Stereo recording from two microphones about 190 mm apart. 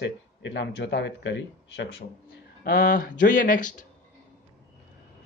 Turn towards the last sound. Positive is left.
turn(degrees=40)  # may be behind; listen again after turning